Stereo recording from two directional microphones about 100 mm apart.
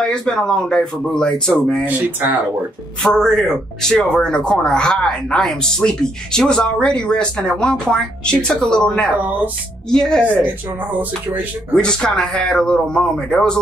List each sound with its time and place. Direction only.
0.0 s a man's voice: 5° left (ahead or behind)
1.9 s speech: 15° right (ahead or behind)
3.0 s a man's voice: 5° left (ahead or behind)
9.2 s speech: 15° right (ahead or behind)
9.8 s a man's voice: 5° left (ahead or behind)
11.7 s a man's voice: 5° left (ahead or behind)